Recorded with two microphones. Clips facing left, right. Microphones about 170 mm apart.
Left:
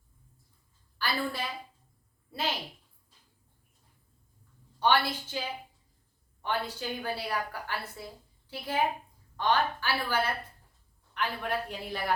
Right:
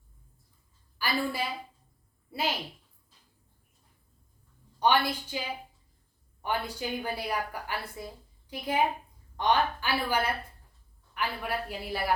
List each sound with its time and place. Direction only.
0.9 s a woman's voice: 10° right (ahead or behind)
4.8 s a woman's voice: 15° right (ahead or behind)
6.4 s a woman's voice: 10° right (ahead or behind)